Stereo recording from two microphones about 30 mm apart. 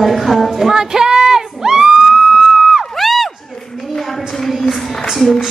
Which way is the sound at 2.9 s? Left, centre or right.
Centre.